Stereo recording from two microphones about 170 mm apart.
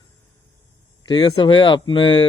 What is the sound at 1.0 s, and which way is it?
Speech, 25° left (ahead or behind).